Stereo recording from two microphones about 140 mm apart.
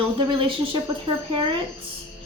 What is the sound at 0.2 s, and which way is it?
Speech, 40° right (ahead or behind).